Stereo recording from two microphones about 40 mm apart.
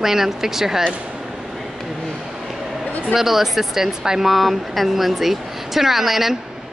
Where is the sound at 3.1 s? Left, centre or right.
Centre.